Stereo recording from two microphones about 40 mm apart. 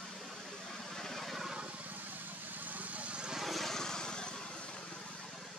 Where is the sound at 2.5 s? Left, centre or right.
Right.